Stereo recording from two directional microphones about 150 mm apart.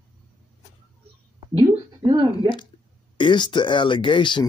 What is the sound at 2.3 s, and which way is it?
Speech, 30° left (ahead or behind).